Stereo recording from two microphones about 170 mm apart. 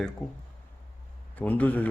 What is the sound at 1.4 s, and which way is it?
Speech, 10° left (ahead or behind).